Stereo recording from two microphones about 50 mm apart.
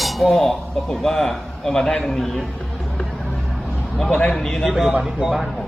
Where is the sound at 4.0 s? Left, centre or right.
Centre.